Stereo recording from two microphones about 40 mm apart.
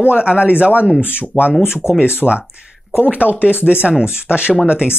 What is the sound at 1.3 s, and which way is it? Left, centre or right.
Speech, centre.